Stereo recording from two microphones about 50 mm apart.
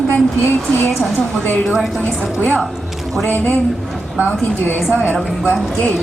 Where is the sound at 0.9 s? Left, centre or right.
Centre.